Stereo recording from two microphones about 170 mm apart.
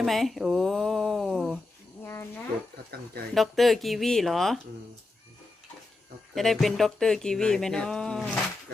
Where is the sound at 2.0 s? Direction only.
15° left (ahead or behind).